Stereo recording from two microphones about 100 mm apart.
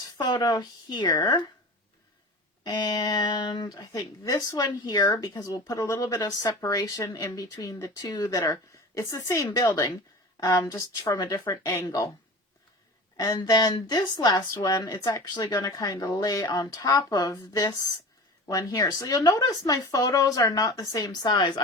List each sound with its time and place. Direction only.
0.2 s speech: 45° left (ahead or behind)
2.6 s speech: 40° left (ahead or behind)
13.1 s speech: 35° left (ahead or behind)